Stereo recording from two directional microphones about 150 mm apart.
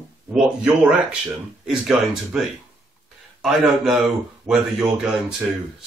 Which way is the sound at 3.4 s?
Centre (ahead or behind).